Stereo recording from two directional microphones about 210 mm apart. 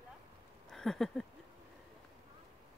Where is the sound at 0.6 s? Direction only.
Centre (ahead or behind).